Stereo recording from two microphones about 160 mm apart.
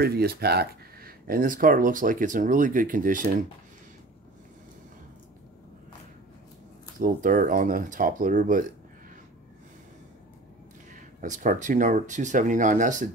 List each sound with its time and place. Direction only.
0.0 s speech: 75° right (ahead or behind); by 3.3 s 60° right (ahead or behind)
7.0 s speech: 60° right (ahead or behind)
10.9 s speech: 55° right (ahead or behind)